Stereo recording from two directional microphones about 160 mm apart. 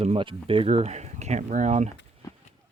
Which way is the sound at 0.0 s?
35° right (ahead or behind).